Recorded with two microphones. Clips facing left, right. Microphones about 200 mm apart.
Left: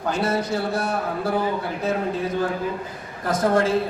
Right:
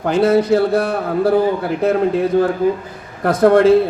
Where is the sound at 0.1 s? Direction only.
60° right (ahead or behind).